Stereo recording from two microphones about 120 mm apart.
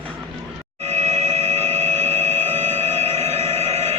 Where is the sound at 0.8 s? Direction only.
70° right (ahead or behind).